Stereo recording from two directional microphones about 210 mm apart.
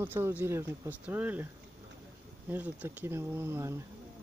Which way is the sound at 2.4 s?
10° right (ahead or behind).